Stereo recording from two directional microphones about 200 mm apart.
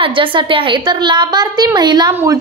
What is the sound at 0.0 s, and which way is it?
A woman's voice, 25° right (ahead or behind).